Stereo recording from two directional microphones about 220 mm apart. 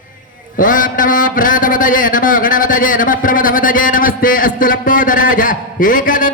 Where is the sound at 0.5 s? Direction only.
35° left (ahead or behind).